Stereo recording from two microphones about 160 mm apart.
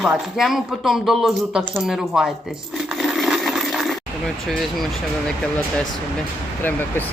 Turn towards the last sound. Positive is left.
turn(degrees=10)  # may be behind; listen again after turning